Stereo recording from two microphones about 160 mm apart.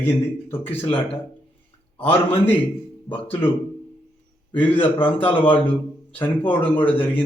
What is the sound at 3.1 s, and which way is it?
A man's voice, 10° left (ahead or behind).